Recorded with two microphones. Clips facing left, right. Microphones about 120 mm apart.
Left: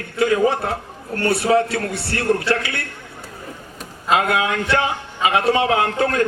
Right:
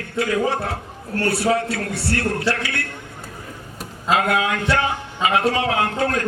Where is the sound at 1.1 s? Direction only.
25° left (ahead or behind).